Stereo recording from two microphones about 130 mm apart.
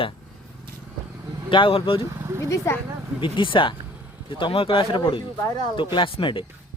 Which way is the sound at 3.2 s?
40° left (ahead or behind).